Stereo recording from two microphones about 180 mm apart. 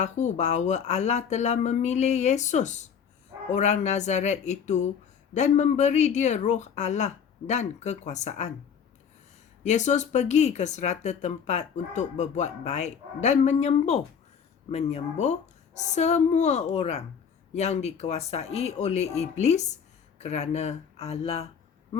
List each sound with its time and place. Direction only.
0.0 s speech: 40° left (ahead or behind)
9.6 s speech: 40° left (ahead or behind)